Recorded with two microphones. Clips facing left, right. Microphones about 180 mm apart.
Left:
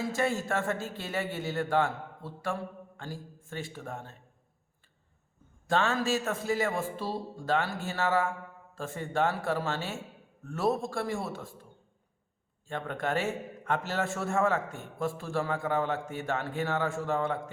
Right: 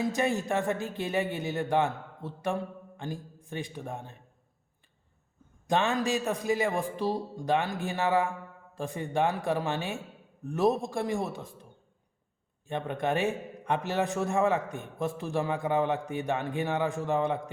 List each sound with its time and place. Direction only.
0.0 s a man's voice: 20° right (ahead or behind)
5.6 s a man's voice: 15° right (ahead or behind)
12.6 s a man's voice: 20° right (ahead or behind)